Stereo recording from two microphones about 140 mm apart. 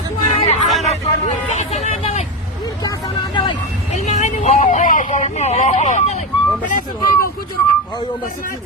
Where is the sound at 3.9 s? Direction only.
55° left (ahead or behind).